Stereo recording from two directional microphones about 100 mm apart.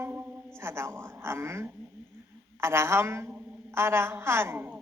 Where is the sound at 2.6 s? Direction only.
25° right (ahead or behind).